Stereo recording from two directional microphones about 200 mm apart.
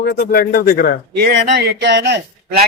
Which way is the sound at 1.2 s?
50° right (ahead or behind).